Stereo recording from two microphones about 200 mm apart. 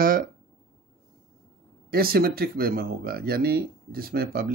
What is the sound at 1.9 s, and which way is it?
Speech, 50° right (ahead or behind).